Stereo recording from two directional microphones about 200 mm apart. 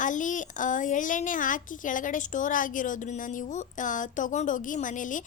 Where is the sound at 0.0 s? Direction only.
40° left (ahead or behind).